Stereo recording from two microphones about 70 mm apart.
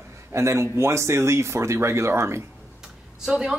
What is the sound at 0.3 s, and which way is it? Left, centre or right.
Speech, right.